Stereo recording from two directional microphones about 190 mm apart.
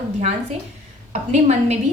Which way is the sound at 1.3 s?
35° right (ahead or behind).